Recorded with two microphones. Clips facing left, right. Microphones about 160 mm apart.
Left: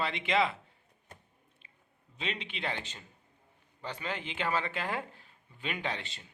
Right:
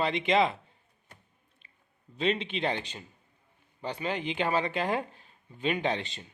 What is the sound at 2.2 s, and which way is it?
Speech, 30° right (ahead or behind).